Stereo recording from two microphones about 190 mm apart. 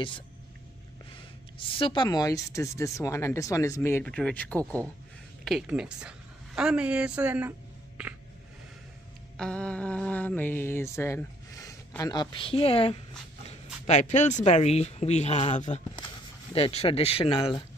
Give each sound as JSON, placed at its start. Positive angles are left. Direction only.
{"t": 1.6, "sound": "a woman's voice", "side_deg": 30}
{"t": 9.4, "sound": "speech", "side_deg": 5}